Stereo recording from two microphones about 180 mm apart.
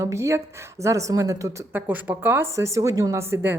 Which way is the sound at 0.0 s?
15° right (ahead or behind).